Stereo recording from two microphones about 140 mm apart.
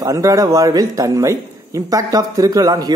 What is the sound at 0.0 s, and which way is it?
Speech, 25° right (ahead or behind).